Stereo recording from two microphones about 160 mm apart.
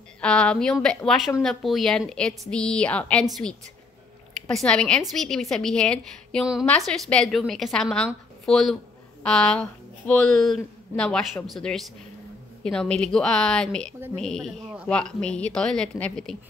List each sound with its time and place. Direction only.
0.2 s a woman's voice: 5° left (ahead or behind)
4.5 s a woman's voice: 5° left (ahead or behind)